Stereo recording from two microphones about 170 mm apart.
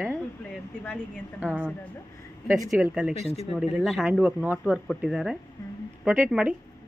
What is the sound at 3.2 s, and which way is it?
Speech, 40° left (ahead or behind).